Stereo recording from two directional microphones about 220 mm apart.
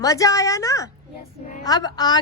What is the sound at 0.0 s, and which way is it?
A woman's voice, 15° left (ahead or behind).